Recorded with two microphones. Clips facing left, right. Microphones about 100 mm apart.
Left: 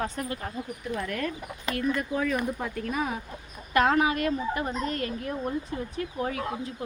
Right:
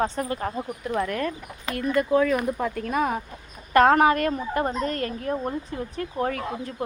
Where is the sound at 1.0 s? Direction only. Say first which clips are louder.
Right 3 dB; 40° right (ahead or behind).